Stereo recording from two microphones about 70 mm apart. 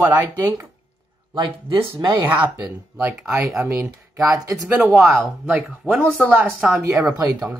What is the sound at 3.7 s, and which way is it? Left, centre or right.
Speech, right.